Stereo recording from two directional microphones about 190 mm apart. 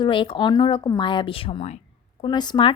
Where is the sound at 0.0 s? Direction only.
25° left (ahead or behind).